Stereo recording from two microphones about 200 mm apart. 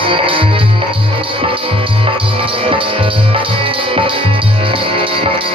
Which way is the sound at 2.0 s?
25° right (ahead or behind).